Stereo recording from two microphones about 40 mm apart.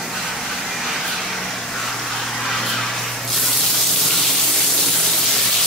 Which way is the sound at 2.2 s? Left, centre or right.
Centre.